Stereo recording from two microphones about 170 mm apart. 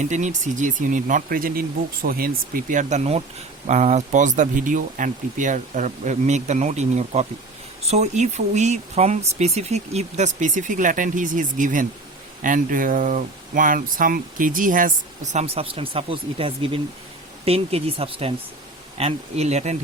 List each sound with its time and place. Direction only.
0.0 s speech: 45° right (ahead or behind)